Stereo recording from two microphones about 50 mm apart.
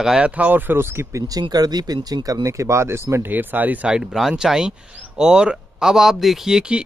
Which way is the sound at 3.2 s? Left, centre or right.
Right.